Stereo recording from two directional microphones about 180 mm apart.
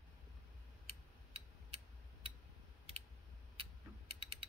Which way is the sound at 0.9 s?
35° right (ahead or behind).